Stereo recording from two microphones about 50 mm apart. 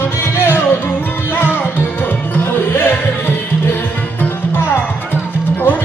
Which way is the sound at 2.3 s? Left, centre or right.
Left.